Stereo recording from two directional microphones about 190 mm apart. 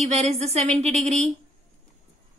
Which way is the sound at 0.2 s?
35° right (ahead or behind).